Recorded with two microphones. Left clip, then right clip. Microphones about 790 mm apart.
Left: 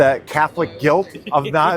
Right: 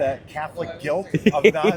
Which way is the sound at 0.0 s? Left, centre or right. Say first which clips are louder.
Left 10 dB; left.